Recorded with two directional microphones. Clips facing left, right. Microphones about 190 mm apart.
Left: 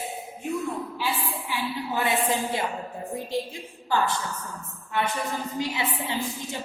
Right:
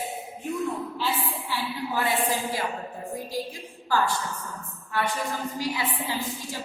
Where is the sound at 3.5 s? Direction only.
20° left (ahead or behind).